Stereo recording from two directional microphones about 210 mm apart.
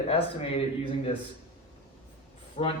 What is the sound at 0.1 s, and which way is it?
Speech, 25° left (ahead or behind).